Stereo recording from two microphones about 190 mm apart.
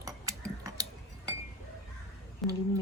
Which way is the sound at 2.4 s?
Centre (ahead or behind).